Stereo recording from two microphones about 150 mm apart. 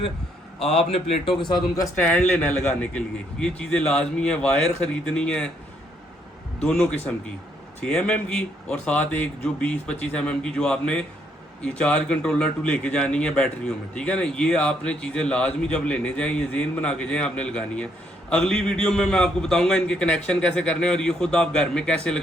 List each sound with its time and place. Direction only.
0.9 s a man's voice: 40° left (ahead or behind)
2.0 s a man's voice: 10° left (ahead or behind)
6.6 s a man's voice: 5° left (ahead or behind)
7.9 s a man's voice: 5° left (ahead or behind)